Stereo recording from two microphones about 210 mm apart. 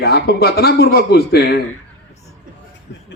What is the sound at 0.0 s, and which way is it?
A man's voice, 50° left (ahead or behind).